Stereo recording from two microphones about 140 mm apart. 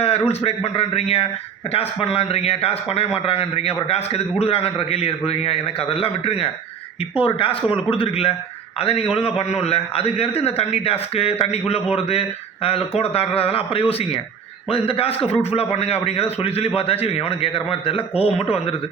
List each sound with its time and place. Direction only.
0.0 s a man's voice: 45° left (ahead or behind)